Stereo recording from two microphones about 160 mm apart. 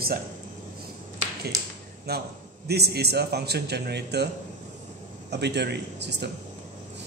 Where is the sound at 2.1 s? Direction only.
90° right.